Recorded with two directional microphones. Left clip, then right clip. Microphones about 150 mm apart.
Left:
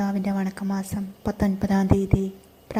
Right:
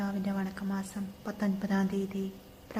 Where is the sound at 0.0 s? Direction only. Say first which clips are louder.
Left 8 dB; 40° left (ahead or behind).